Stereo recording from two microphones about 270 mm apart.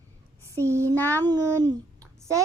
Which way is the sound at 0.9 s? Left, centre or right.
Centre.